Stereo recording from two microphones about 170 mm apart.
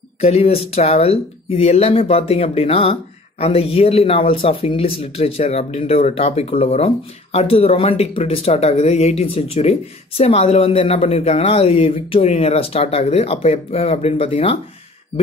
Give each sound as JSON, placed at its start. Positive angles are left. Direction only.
{"t": 0.2, "sound": "speech", "side_deg": 35}